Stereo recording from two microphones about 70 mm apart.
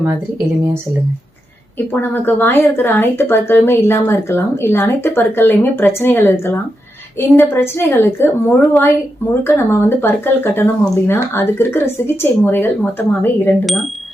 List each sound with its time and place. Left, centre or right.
1.9 s speech: left